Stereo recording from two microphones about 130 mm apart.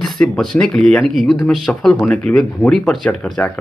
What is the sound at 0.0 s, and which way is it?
Speech, 5° left (ahead or behind).